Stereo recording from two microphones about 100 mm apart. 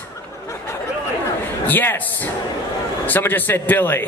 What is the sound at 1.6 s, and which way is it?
Speech, 20° left (ahead or behind).